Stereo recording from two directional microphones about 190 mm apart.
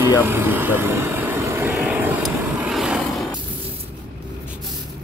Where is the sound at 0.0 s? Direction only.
10° right (ahead or behind).